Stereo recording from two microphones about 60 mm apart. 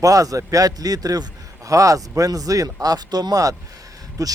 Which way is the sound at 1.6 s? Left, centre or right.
Right.